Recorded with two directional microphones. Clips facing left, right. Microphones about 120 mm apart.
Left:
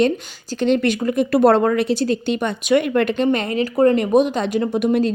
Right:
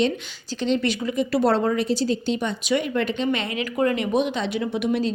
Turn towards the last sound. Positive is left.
turn(degrees=45)  # may be behind; listen again after turning